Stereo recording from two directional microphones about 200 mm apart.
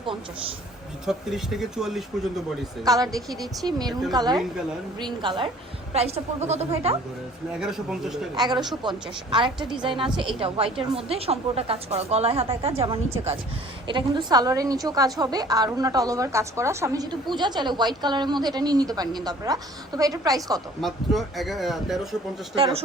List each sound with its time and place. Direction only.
1.0 s speech: centre (ahead or behind)
2.8 s a woman's voice: 20° right (ahead or behind)
3.2 s speech: centre (ahead or behind)
3.6 s a woman's voice: 20° right (ahead or behind)
7.6 s speech: centre (ahead or behind)
8.4 s a woman's voice: 20° right (ahead or behind)
20.8 s speech: centre (ahead or behind)
22.5 s a woman's voice: 25° right (ahead or behind)